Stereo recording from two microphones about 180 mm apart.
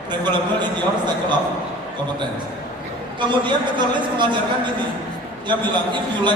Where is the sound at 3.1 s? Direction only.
25° right (ahead or behind).